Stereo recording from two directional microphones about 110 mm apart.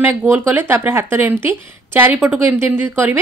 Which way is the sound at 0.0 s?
15° right (ahead or behind).